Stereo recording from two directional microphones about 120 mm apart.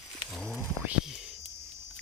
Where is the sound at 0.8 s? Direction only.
5° right (ahead or behind).